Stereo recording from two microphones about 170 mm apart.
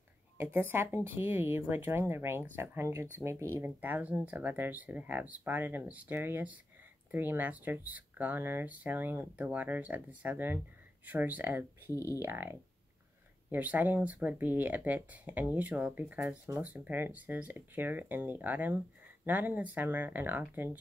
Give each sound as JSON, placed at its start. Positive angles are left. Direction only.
{"t": 0.4, "sound": "speech", "side_deg": -10}
{"t": 11.9, "sound": "speech", "side_deg": 15}
{"t": 12.2, "sound": "speech", "side_deg": -15}